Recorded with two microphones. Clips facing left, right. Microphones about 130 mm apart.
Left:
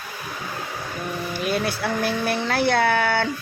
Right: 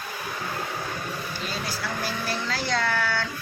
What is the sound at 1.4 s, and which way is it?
Speech, 60° left (ahead or behind).